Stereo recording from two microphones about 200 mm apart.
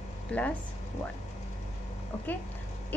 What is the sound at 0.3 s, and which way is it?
Speech, 5° left (ahead or behind).